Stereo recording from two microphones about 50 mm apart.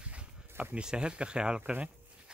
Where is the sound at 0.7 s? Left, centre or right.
Centre.